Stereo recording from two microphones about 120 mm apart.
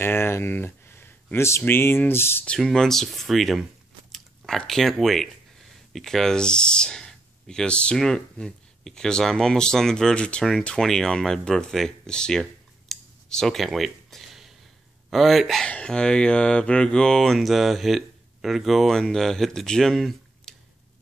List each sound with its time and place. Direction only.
0.0 s speech: 20° left (ahead or behind)
2.4 s speech: 5° left (ahead or behind)